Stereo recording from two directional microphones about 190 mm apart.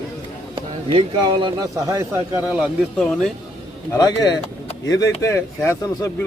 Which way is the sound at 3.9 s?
20° left (ahead or behind).